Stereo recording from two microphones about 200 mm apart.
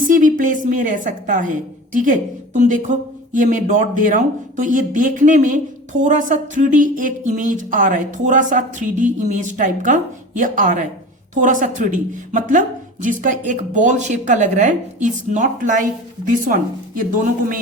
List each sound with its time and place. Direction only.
0.1 s a woman's voice: 40° right (ahead or behind)